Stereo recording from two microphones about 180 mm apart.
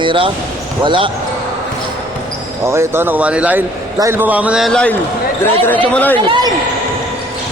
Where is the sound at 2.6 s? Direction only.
15° right (ahead or behind); by 4.9 s centre (ahead or behind).